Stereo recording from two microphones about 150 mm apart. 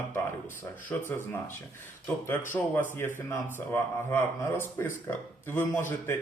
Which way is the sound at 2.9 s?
15° left (ahead or behind).